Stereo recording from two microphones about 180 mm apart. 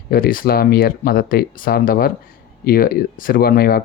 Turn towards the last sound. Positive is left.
turn(degrees=55)  # may be behind; listen again after turning